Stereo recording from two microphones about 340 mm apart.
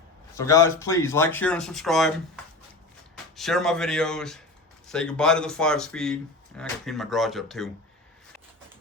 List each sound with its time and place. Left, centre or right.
0.3 s speech: centre